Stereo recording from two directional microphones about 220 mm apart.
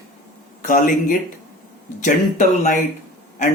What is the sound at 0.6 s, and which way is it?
Speech, 40° left (ahead or behind).